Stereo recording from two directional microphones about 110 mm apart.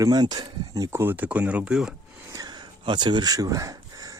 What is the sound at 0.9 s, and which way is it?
Speech, 20° right (ahead or behind).